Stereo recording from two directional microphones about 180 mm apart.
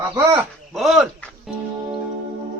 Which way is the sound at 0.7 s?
Centre (ahead or behind).